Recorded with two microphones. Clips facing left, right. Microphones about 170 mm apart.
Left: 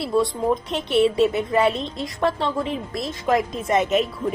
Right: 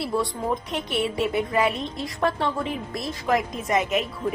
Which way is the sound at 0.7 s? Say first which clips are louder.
Left 7 dB; 25° left (ahead or behind).